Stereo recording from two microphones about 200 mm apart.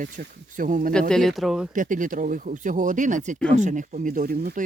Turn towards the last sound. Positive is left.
turn(degrees=-50)  # may be behind; listen again after turning